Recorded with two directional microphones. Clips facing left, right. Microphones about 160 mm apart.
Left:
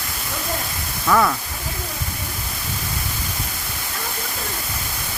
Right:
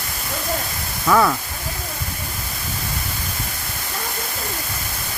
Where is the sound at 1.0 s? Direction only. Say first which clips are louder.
Right 1 dB; 5° right (ahead or behind).